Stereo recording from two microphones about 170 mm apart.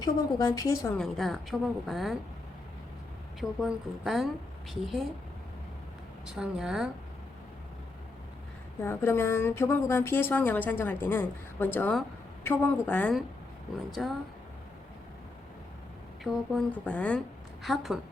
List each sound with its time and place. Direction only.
0.0 s a woman's voice: 20° left (ahead or behind)
0.9 s a woman's voice: centre (ahead or behind)
3.6 s a woman's voice: centre (ahead or behind)
6.2 s a woman's voice: 5° right (ahead or behind)
8.8 s a woman's voice: 15° left (ahead or behind)
16.2 s a woman's voice: 5° left (ahead or behind)